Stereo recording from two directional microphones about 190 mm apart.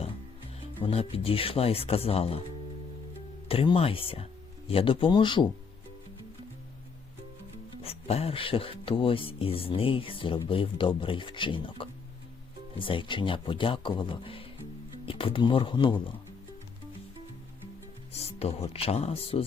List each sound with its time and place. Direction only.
0.8 s speech: 30° left (ahead or behind)
3.5 s speech: 30° left (ahead or behind)
7.8 s speech: 30° left (ahead or behind)
18.3 s speech: 30° left (ahead or behind)